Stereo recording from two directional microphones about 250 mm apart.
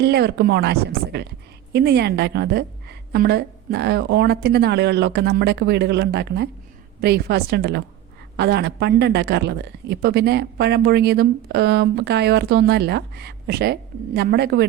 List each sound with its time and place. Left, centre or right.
0.0 s speech: right